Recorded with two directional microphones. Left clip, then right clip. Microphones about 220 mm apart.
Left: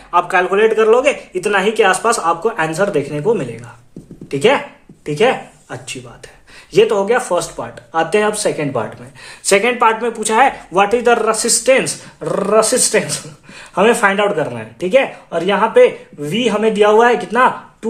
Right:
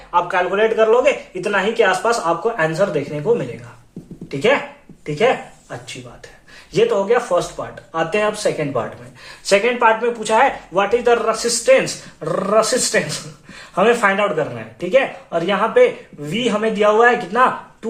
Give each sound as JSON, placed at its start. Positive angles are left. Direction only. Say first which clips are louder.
{"t": 0.1, "sound": "speech", "louder": "left 4 dB", "side_deg": 45}
{"t": 5.0, "sound": "speech", "louder": "left 2 dB", "side_deg": 45}
{"t": 6.7, "sound": "speech", "louder": "left 3 dB", "side_deg": 45}